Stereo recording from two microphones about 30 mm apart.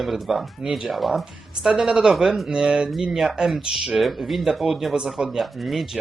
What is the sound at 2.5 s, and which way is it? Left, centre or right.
Speech, right.